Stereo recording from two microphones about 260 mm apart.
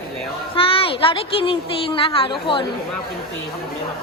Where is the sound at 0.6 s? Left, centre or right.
Left.